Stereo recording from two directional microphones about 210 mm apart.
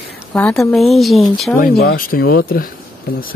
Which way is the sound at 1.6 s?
45° left (ahead or behind).